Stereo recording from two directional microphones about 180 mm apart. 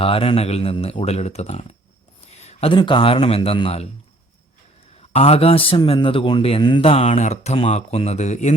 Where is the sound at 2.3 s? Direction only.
35° left (ahead or behind).